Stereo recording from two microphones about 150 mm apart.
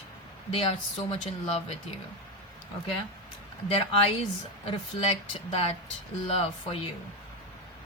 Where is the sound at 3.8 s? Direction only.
35° left (ahead or behind).